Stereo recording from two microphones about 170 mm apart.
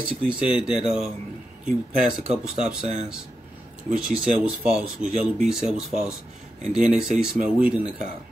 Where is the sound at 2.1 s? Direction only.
5° right (ahead or behind).